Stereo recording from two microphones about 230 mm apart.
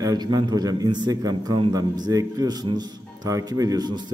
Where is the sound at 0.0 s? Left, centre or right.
Centre.